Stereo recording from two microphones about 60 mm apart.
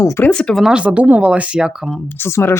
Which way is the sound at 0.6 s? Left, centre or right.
Centre.